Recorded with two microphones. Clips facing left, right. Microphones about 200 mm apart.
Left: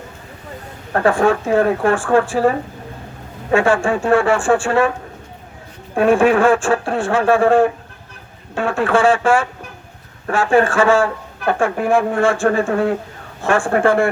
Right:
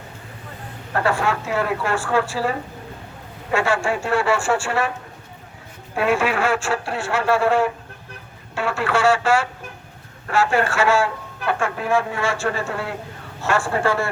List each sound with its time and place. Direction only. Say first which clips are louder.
0.9 s speech: left 7 dB; 50° left (ahead or behind)
5.9 s speech: left 7 dB; 50° left (ahead or behind)